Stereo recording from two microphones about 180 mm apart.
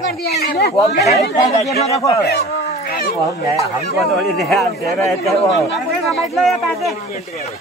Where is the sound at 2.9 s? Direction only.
55° left (ahead or behind).